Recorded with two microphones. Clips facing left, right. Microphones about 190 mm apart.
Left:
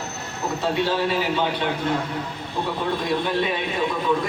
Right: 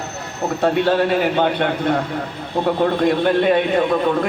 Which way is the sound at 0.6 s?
60° right (ahead or behind).